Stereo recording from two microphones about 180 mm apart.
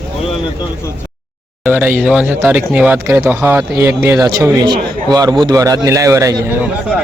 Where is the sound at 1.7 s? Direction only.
10° right (ahead or behind).